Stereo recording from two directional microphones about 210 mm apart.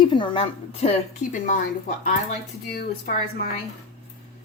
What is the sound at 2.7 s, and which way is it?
Speech, 45° left (ahead or behind).